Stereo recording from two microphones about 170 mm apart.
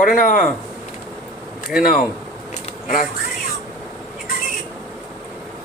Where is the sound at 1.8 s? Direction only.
55° left (ahead or behind).